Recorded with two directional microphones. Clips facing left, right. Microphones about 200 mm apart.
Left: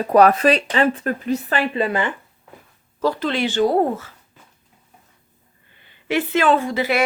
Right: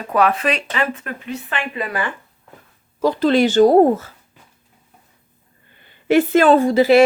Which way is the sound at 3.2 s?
40° right (ahead or behind).